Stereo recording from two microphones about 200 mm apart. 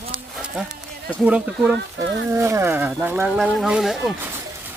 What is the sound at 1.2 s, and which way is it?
Speech, 5° right (ahead or behind).